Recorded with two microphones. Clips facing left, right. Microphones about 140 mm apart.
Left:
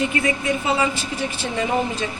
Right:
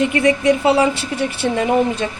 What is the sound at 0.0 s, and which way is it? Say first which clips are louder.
A woman's voice: right 7 dB; 70° right (ahead or behind).